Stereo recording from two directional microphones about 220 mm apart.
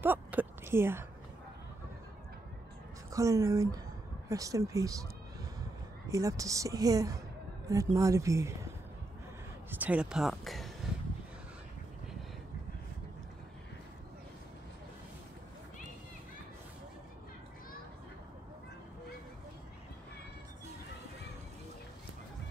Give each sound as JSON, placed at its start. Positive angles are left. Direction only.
{"t": 0.0, "sound": "a woman's voice", "side_deg": -10}
{"t": 3.1, "sound": "a woman's voice", "side_deg": -15}
{"t": 6.1, "sound": "a woman's voice", "side_deg": -15}
{"t": 9.7, "sound": "speech", "side_deg": -5}